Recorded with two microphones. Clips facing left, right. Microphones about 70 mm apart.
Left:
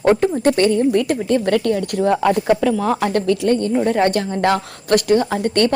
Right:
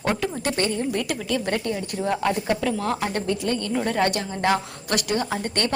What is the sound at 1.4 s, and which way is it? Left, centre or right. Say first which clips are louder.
Speech: left 8 dB; left.